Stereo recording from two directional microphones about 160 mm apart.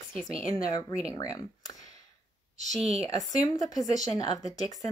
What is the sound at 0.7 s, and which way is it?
Speech, 25° left (ahead or behind).